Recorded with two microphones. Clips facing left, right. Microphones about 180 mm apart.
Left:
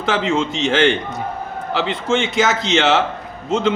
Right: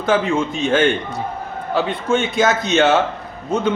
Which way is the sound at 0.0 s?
85° left.